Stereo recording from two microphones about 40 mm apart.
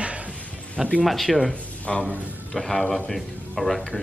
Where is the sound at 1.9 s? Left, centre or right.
Centre.